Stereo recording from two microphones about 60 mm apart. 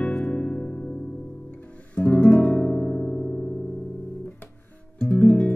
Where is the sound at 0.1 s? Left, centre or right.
Centre.